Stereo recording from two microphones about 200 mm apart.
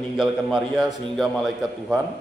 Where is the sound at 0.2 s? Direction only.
Centre (ahead or behind).